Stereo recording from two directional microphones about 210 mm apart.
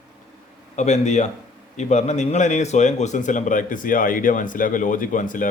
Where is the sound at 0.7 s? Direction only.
35° left (ahead or behind).